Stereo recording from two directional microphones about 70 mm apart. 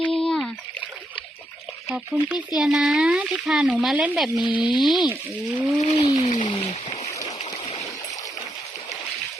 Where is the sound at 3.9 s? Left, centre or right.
Right.